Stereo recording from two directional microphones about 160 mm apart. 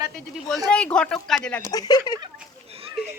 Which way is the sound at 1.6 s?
25° left (ahead or behind).